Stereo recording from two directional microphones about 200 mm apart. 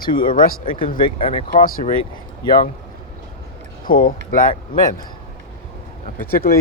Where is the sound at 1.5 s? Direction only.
45° left (ahead or behind).